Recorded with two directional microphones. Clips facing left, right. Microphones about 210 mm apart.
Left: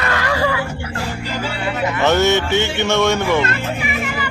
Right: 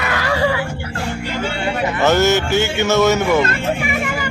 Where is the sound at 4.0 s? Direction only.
45° right (ahead or behind).